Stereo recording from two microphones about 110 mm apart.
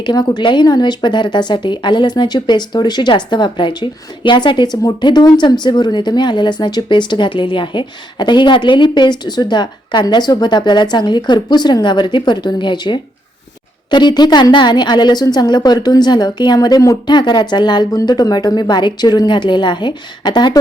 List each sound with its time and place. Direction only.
0.0 s a woman's voice: 40° left (ahead or behind)